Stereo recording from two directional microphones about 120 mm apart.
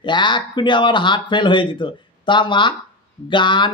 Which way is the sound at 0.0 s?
40° left (ahead or behind).